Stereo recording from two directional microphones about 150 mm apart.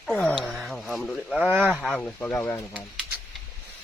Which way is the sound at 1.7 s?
5° left (ahead or behind).